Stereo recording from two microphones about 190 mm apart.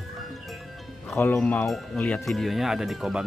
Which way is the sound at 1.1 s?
10° left (ahead or behind).